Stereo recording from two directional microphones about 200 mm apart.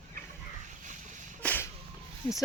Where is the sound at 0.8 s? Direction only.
40° right (ahead or behind).